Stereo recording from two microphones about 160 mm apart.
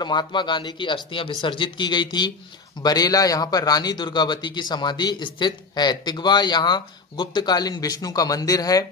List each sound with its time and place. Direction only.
0.0 s a man's voice: 25° left (ahead or behind)